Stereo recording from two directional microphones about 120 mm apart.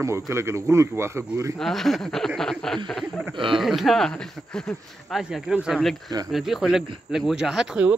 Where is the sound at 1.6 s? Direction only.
Centre (ahead or behind).